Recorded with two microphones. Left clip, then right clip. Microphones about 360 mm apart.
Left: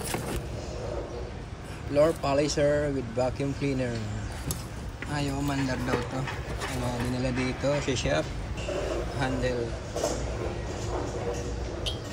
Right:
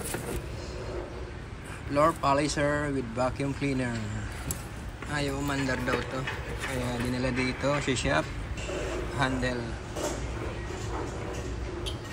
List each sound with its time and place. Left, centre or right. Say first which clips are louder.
2.0 s speech: left 1 dB; centre
5.1 s a man's voice: even; centre